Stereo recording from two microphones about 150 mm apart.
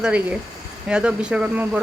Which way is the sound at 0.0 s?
10° right (ahead or behind).